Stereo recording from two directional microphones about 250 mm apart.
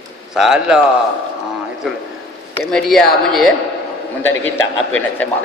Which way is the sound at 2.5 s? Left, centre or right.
Centre.